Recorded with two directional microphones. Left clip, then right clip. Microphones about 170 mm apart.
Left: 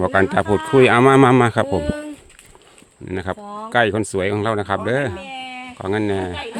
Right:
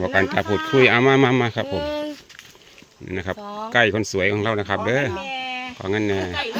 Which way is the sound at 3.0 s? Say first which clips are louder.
Left 2 dB; 20° left (ahead or behind).